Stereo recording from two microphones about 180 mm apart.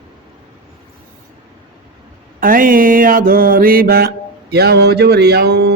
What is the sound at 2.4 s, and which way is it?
Mantra, 50° right (ahead or behind).